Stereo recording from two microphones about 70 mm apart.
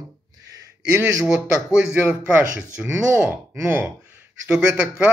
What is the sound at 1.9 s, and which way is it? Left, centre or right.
A man's voice, right.